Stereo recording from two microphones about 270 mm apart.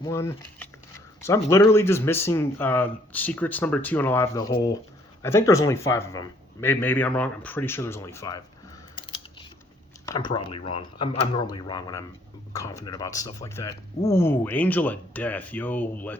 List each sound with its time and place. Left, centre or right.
0.0 s speech: centre
10.1 s speech: centre